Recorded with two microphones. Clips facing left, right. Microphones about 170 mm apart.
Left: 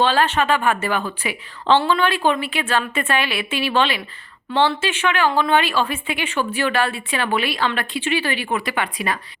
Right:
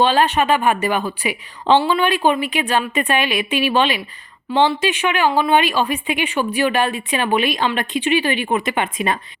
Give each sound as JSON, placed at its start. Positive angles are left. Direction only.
{"t": 0.0, "sound": "speech", "side_deg": -15}